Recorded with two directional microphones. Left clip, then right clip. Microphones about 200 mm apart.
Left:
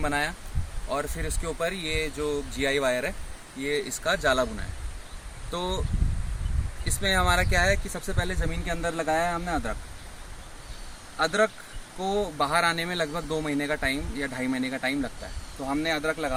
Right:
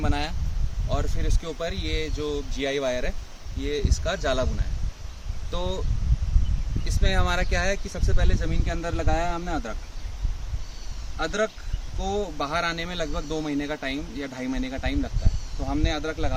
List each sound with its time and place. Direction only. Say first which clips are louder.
0.0 s speech: left 2 dB; 15° left (ahead or behind); by 4.4 s 5° right (ahead or behind)
5.5 s speech: left 1 dB; 5° right (ahead or behind)
7.0 s speech: left 3 dB; 5° right (ahead or behind)
11.2 s speech: left 3 dB; 15° left (ahead or behind)